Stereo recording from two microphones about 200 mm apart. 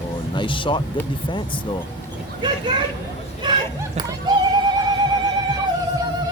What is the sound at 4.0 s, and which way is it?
Neigh, 20° right (ahead or behind).